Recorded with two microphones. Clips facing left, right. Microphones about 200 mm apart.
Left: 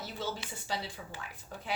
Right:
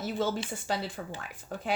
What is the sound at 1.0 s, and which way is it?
Speech, 55° right (ahead or behind).